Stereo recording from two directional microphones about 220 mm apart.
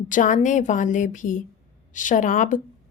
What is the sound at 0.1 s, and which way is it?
A woman's voice, 35° left (ahead or behind).